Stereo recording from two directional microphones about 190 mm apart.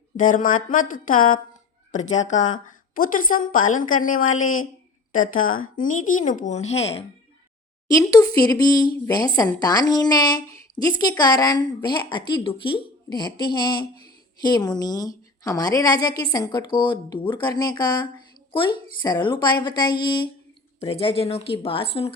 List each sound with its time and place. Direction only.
0.2 s a woman's voice: 45° left (ahead or behind)
7.9 s a woman's voice: 20° left (ahead or behind)